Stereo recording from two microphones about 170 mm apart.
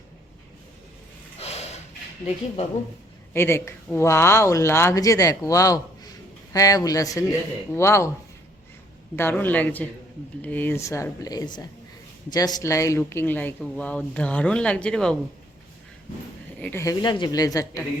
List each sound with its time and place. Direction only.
1.4 s a sound: 40° left (ahead or behind)
3.3 s speech: 15° left (ahead or behind)
9.1 s speech: 10° left (ahead or behind)
16.6 s speech: 10° left (ahead or behind)
16.8 s speech: 25° left (ahead or behind)